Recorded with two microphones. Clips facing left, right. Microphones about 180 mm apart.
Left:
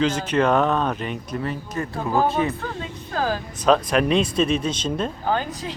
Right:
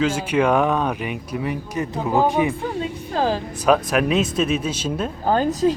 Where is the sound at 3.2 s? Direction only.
25° right (ahead or behind).